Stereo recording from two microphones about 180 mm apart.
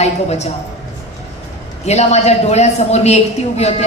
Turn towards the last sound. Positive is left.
turn(degrees=35)  # may be behind; listen again after turning